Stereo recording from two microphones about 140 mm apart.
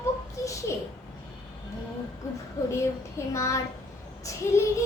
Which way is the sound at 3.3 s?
20° left (ahead or behind).